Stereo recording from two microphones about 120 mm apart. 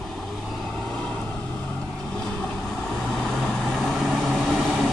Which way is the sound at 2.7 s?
Centre (ahead or behind).